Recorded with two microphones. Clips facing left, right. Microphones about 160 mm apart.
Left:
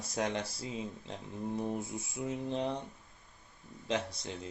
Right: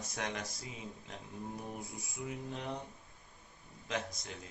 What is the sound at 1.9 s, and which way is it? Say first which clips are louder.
Speech: left 6 dB; 25° left (ahead or behind).